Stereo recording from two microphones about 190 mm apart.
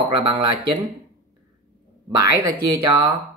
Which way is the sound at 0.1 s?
25° right (ahead or behind).